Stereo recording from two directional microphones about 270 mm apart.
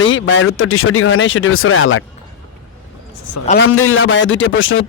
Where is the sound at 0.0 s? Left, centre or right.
Left.